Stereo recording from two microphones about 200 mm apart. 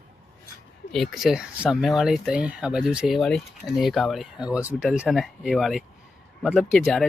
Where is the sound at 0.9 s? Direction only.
Centre (ahead or behind).